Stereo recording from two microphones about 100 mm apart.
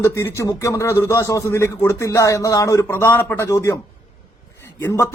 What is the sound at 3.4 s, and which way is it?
Speech, 30° left (ahead or behind).